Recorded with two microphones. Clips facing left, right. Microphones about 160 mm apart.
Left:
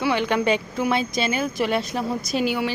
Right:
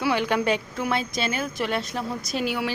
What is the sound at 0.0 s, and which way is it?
A woman's voice, 5° right (ahead or behind).